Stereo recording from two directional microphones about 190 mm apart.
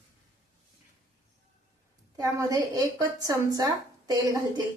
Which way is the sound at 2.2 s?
20° right (ahead or behind).